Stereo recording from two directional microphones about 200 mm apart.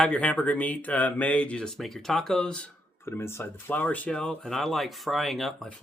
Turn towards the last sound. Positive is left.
turn(degrees=0)  # may be behind; listen again after turning